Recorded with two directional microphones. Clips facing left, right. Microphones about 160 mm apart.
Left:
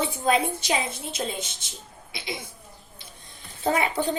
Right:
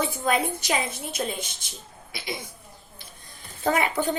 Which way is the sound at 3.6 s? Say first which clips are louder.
Even; 30° left (ahead or behind).